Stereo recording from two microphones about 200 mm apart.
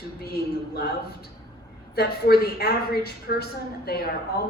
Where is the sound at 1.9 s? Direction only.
50° left (ahead or behind).